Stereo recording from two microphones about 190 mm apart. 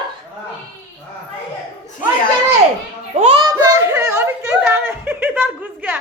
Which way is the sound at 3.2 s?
25° right (ahead or behind).